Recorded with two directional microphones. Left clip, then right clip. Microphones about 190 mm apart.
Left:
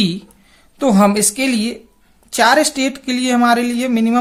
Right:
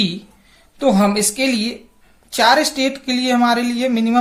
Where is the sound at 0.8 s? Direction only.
45° left (ahead or behind).